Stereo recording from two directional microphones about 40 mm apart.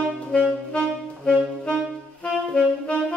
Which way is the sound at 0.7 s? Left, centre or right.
Left.